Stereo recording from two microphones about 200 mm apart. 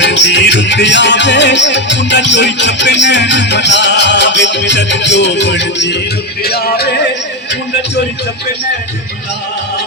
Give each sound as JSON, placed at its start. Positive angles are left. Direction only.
{"t": 0.0, "sound": "music", "side_deg": 60}
{"t": 6.4, "sound": "music", "side_deg": 50}